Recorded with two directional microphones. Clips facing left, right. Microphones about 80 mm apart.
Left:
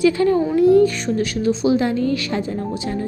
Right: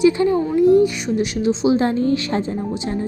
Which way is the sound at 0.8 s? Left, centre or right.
Centre.